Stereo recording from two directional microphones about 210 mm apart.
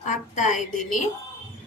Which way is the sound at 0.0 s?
35° left (ahead or behind).